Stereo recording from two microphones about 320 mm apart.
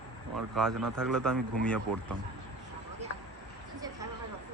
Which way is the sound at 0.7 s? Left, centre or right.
Right.